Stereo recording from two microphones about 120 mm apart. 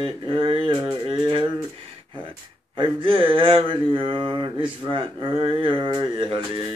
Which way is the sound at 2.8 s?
50° right (ahead or behind).